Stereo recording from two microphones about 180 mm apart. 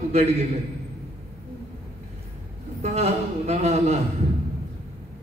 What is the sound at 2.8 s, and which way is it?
A man's voice, 35° right (ahead or behind).